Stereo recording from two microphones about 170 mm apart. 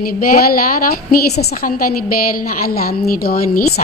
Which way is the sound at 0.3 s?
55° left (ahead or behind).